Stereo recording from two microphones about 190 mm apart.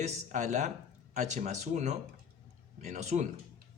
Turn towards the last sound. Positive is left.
turn(degrees=-40)  # may be behind; listen again after turning